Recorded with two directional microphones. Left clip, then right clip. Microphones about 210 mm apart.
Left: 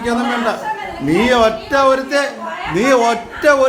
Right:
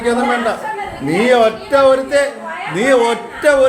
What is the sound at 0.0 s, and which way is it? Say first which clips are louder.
A man's voice: right 2 dB; 10° left (ahead or behind).